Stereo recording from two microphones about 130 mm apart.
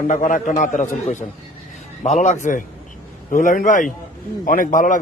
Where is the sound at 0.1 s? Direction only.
85° left.